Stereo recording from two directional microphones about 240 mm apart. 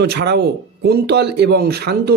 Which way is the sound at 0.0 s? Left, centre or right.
Right.